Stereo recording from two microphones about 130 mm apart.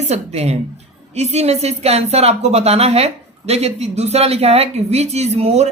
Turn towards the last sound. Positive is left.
turn(degrees=-55)  # may be behind; listen again after turning